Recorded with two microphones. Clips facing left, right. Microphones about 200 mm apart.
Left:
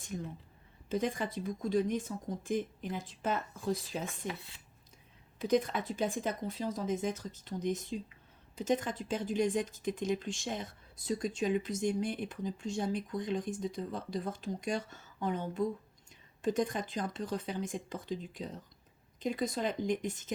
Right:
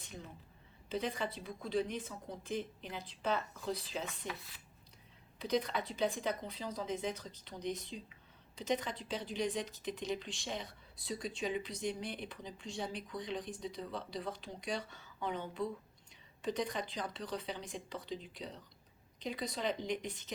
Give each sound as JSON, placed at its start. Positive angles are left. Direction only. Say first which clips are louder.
{"t": 0.9, "sound": "a woman's voice", "louder": "left 4 dB", "side_deg": 50}
{"t": 4.3, "sound": "speech", "louder": "left 4 dB", "side_deg": 25}
{"t": 5.4, "sound": "a woman's voice", "louder": "left 5 dB", "side_deg": 45}